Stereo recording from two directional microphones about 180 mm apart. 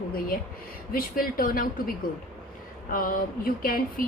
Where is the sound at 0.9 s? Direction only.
55° left (ahead or behind).